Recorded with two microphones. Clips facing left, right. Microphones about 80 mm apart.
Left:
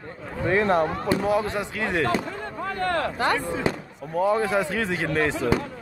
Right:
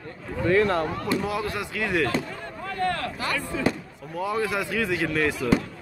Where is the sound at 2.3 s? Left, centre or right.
Left.